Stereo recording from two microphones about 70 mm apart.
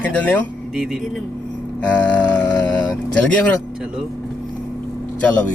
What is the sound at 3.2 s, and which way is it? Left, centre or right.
Speech, centre.